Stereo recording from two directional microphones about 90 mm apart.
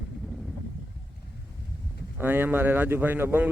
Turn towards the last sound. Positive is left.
turn(degrees=-25)  # may be behind; listen again after turning